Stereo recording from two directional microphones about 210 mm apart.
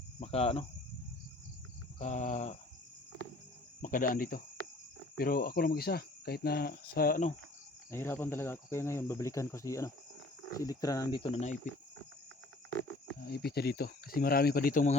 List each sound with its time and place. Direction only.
0.2 s speech: 30° left (ahead or behind)
2.0 s cricket: 35° left (ahead or behind)
3.8 s cricket: 40° left (ahead or behind)
5.1 s speech: 45° left (ahead or behind)
7.9 s speech: 10° left (ahead or behind); by 11.6 s 35° left (ahead or behind)
13.1 s speech: 50° left (ahead or behind)